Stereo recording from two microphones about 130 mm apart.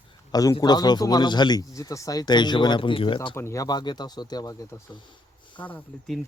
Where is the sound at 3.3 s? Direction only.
20° left (ahead or behind).